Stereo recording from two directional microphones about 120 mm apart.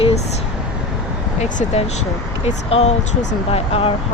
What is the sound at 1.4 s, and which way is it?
Speech, 70° left (ahead or behind).